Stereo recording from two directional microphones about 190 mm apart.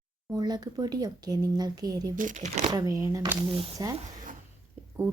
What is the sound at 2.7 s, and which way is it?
A woman's voice, 20° right (ahead or behind).